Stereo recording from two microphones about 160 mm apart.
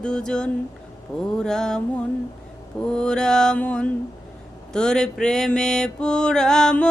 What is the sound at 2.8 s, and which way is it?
Female singing, 5° left (ahead or behind).